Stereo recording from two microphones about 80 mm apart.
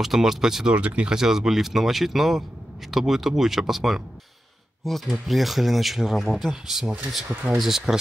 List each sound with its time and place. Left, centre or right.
0.0 s speech: centre